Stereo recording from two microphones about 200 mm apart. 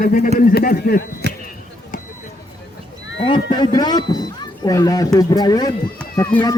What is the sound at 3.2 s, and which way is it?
Speech, 25° left (ahead or behind).